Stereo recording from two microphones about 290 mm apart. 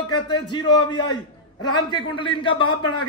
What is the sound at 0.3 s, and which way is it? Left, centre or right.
A man's voice, centre.